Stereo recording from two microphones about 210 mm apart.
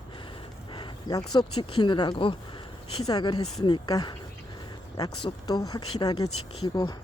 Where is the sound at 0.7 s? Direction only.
20° left (ahead or behind).